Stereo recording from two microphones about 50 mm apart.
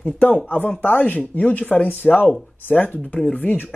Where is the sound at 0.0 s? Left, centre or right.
Left.